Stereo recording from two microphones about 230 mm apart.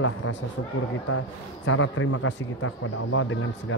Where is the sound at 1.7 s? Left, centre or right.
Left.